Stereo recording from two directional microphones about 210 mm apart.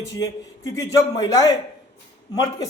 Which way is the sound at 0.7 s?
15° left (ahead or behind).